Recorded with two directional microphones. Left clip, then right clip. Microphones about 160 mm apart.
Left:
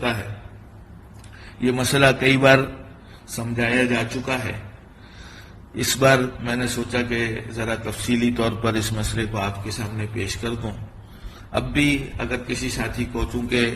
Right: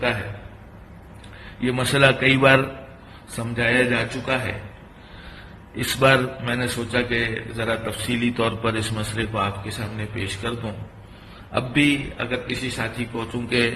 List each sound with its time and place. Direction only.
1.6 s a man's voice: 55° left (ahead or behind)
3.3 s speech: 55° left (ahead or behind)
5.7 s a man's voice: 45° left (ahead or behind)
11.5 s speech: 55° left (ahead or behind)